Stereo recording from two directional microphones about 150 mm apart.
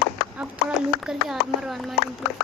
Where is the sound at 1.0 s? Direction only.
5° right (ahead or behind).